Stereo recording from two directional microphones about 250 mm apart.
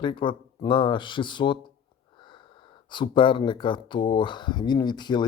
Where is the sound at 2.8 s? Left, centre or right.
Centre.